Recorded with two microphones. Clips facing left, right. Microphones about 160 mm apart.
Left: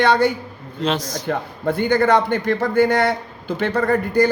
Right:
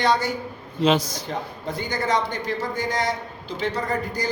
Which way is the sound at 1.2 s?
60° left (ahead or behind).